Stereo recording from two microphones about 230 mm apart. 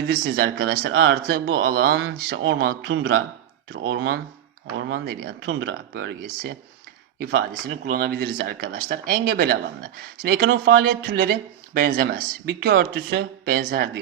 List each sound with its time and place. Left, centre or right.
0.1 s speech: right